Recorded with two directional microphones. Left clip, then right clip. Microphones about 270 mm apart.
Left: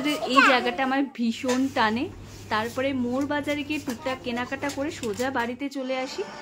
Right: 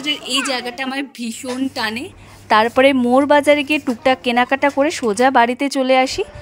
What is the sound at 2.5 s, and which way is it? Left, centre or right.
A woman's voice, right.